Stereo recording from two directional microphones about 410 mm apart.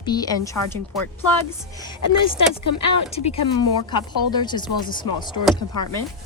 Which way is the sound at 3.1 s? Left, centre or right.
Centre.